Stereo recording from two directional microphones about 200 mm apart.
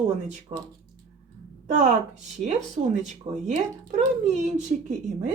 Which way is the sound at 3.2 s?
30° right (ahead or behind).